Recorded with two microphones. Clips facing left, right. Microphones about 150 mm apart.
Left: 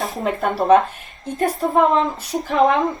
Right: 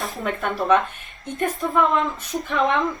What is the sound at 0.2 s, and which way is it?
A woman's voice, 35° left (ahead or behind).